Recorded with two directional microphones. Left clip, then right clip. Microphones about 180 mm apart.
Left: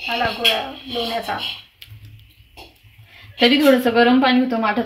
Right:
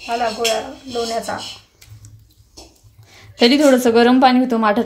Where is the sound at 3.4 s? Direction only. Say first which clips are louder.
Right 2 dB; 90° right; by 4.9 s 70° right (ahead or behind).